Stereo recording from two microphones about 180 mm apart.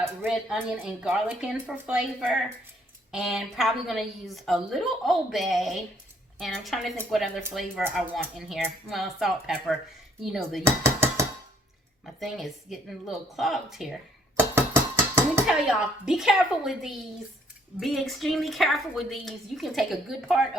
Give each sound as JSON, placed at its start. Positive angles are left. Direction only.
{"t": 0.0, "sound": "a woman's voice", "side_deg": -10}
{"t": 10.6, "sound": "dishes", "side_deg": -15}
{"t": 12.0, "sound": "a woman's voice", "side_deg": 0}
{"t": 14.3, "sound": "dishes", "side_deg": -15}
{"t": 16.0, "sound": "a woman's voice", "side_deg": -5}